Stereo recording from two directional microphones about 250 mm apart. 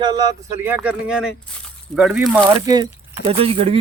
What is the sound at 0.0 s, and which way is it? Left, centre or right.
Speech, centre.